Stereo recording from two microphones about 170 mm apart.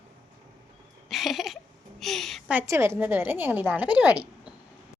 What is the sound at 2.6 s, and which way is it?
A woman's voice, 15° right (ahead or behind).